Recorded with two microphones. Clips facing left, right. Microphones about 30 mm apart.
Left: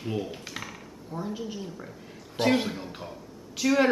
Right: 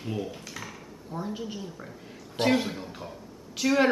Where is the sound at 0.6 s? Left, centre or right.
Left.